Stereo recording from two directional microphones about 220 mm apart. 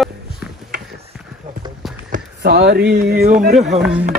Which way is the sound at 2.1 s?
50° right (ahead or behind).